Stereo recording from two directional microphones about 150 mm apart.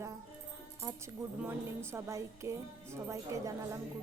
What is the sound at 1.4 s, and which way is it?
Music, 15° right (ahead or behind).